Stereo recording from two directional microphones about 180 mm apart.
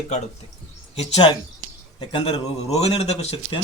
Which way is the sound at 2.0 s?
30° left (ahead or behind).